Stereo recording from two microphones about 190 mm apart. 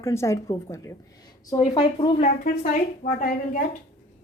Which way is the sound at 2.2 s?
45° left (ahead or behind).